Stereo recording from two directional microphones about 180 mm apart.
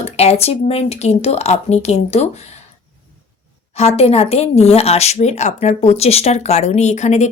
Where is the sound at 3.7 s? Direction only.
35° left (ahead or behind).